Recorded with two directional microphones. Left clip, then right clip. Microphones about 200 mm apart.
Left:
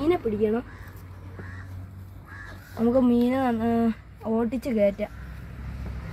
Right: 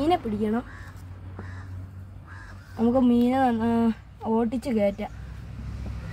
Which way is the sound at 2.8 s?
25° right (ahead or behind).